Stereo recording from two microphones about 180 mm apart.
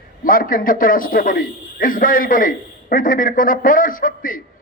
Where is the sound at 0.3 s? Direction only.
50° left (ahead or behind).